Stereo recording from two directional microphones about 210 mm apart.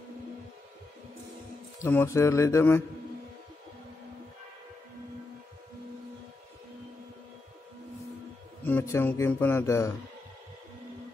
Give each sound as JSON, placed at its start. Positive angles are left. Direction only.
{"t": 1.8, "sound": "speech", "side_deg": 10}
{"t": 8.6, "sound": "speech", "side_deg": 10}